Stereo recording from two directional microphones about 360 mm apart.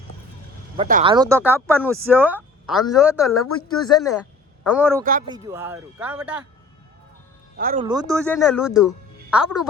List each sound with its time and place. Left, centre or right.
0.8 s a woman's voice: centre
7.5 s speech: right
7.9 s speech: centre